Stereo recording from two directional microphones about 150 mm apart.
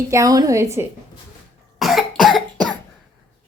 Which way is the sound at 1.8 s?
Centre (ahead or behind).